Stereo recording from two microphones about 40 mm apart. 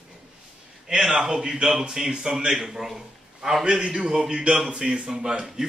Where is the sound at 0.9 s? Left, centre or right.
Centre.